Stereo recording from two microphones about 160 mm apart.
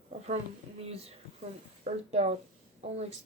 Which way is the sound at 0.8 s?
40° right (ahead or behind).